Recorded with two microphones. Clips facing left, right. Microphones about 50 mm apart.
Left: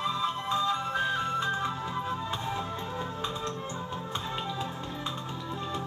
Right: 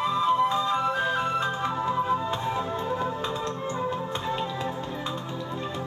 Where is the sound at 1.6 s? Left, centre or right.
Right.